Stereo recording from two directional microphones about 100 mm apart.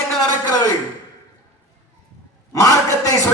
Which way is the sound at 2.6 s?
35° left (ahead or behind).